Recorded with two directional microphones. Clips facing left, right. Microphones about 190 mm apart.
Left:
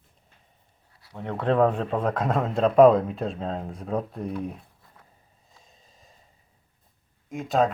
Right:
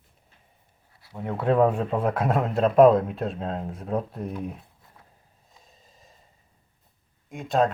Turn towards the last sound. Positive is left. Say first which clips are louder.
# even
turn(degrees=0)  # may be behind; listen again after turning